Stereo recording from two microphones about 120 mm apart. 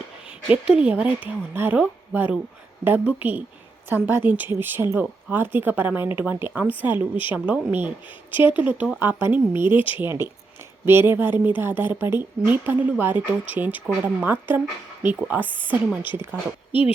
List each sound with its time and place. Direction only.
0.5 s speech: 10° right (ahead or behind)